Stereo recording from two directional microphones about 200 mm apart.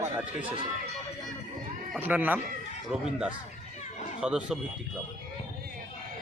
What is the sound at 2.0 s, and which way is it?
A man's voice, 10° right (ahead or behind).